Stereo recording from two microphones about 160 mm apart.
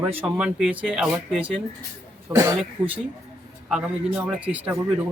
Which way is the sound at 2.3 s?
20° right (ahead or behind).